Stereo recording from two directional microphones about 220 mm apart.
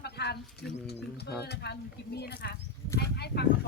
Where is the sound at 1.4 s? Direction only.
50° left (ahead or behind).